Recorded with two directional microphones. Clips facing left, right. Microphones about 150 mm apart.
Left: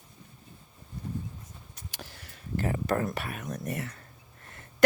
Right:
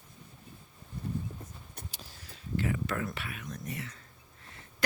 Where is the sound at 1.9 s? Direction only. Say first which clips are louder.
Left 4 dB; 65° left (ahead or behind).